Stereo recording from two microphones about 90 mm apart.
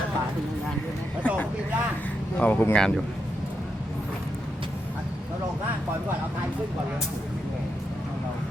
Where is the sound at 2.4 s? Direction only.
20° left (ahead or behind).